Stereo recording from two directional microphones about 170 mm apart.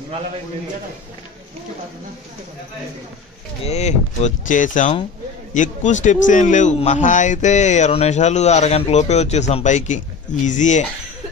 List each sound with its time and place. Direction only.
3.6 s a man's voice: 40° left (ahead or behind)